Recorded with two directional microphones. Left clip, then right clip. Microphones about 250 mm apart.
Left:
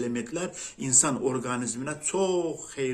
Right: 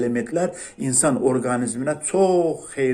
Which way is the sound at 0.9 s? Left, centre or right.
Centre.